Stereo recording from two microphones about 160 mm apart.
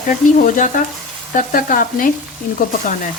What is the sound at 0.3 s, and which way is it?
Speech, 55° left (ahead or behind).